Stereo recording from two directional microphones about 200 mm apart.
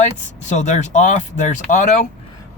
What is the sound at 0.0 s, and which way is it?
Speech, 35° left (ahead or behind).